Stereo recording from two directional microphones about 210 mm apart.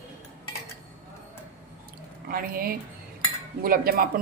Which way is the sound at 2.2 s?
45° right (ahead or behind).